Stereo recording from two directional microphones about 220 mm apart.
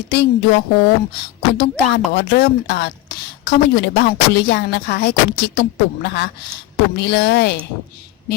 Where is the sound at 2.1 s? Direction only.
45° left (ahead or behind).